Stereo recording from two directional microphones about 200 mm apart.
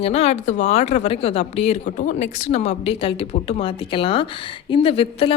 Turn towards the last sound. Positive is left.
turn(degrees=30)  # may be behind; listen again after turning